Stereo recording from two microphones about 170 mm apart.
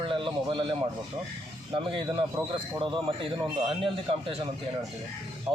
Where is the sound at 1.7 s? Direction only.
30° right (ahead or behind).